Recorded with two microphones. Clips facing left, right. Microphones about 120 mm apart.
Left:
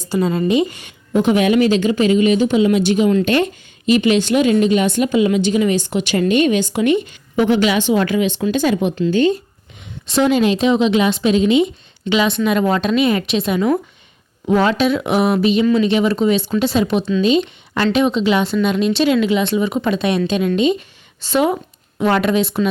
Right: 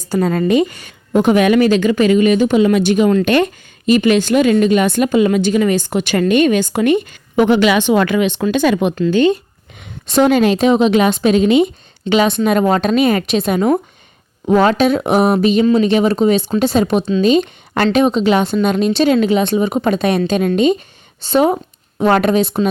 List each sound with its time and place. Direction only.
0.0 s a woman's voice: 45° right (ahead or behind); by 9.3 s 70° right (ahead or behind)
9.7 s a woman's voice: 55° right (ahead or behind); by 22.6 s 40° right (ahead or behind)